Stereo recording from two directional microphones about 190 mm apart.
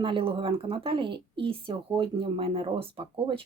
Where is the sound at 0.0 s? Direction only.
25° right (ahead or behind).